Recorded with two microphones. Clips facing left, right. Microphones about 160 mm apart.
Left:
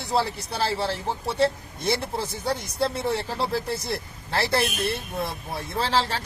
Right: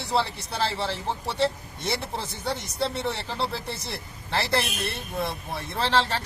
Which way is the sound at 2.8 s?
40° left (ahead or behind).